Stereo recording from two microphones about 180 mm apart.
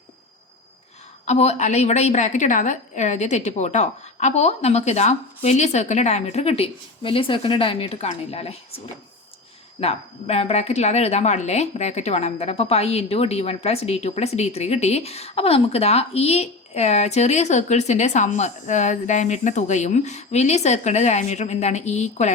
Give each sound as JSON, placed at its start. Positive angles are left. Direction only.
{"t": 1.2, "sound": "speech", "side_deg": 35}
{"t": 9.8, "sound": "speech", "side_deg": 35}